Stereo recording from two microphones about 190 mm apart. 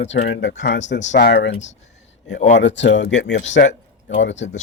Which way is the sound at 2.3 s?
40° left (ahead or behind).